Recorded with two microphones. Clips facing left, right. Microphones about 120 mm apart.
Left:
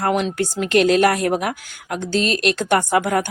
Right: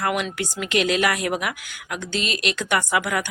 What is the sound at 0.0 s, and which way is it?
A woman's voice, 35° left (ahead or behind).